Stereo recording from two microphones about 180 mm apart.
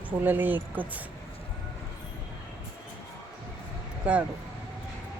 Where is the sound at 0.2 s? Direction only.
10° right (ahead or behind).